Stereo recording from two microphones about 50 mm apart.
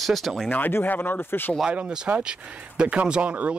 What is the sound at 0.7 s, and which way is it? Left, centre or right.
Speech, left.